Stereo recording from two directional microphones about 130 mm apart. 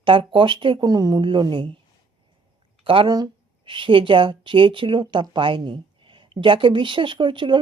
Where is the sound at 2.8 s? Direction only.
40° right (ahead or behind).